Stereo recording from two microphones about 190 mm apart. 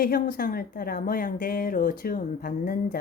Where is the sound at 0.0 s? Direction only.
50° left (ahead or behind).